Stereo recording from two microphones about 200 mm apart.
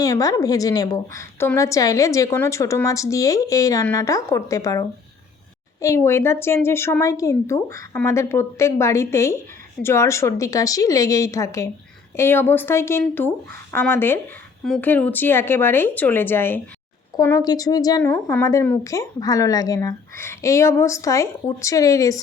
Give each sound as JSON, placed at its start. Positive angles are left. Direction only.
{"t": 0.0, "sound": "speech", "side_deg": 15}